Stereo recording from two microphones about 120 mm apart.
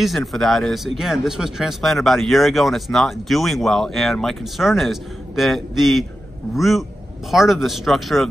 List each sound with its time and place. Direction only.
0.0 s speech: centre (ahead or behind)